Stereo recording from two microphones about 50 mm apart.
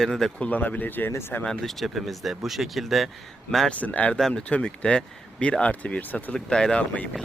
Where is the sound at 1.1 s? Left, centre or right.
Left.